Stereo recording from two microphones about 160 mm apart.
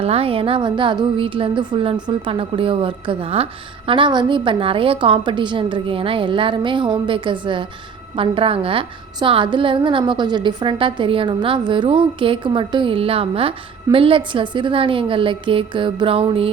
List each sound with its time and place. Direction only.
0.0 s a woman's voice: 35° right (ahead or behind)